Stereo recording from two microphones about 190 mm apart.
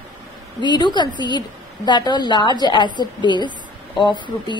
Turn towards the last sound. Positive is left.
turn(degrees=25)  # may be behind; listen again after turning